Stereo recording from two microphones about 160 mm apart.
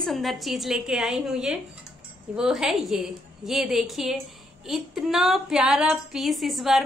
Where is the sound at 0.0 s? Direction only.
Centre (ahead or behind).